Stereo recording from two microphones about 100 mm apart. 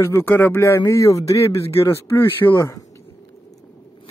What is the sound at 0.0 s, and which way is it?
Speech, 25° left (ahead or behind).